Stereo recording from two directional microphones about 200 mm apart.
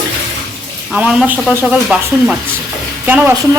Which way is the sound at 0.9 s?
5° right (ahead or behind).